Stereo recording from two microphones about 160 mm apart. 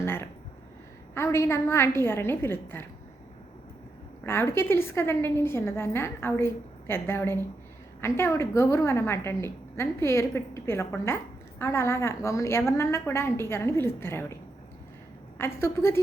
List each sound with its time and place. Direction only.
0.0 s a sound: 15° left (ahead or behind)
1.1 s a woman's voice: 15° left (ahead or behind)
4.3 s a woman's voice: 15° left (ahead or behind)
15.4 s a woman's voice: 15° left (ahead or behind)